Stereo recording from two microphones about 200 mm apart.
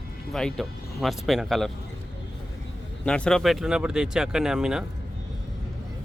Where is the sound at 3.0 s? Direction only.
5° left (ahead or behind).